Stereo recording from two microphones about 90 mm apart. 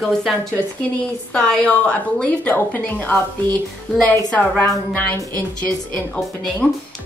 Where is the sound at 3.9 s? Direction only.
5° left (ahead or behind).